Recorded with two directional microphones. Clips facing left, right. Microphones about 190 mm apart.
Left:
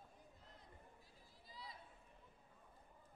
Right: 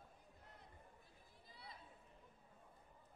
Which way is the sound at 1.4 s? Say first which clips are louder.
Left 4 dB; 60° right (ahead or behind).